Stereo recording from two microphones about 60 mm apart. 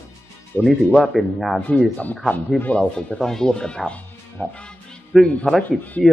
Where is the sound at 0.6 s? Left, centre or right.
Centre.